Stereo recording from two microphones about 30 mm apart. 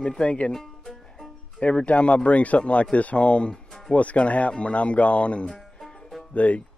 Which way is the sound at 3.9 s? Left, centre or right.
Left.